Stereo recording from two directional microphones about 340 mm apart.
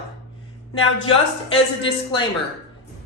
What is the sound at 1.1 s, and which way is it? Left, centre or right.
Speech, centre.